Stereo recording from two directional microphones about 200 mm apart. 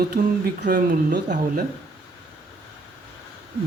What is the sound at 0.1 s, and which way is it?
Speech, 45° right (ahead or behind).